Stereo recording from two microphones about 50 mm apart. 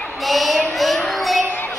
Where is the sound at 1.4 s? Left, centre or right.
Left.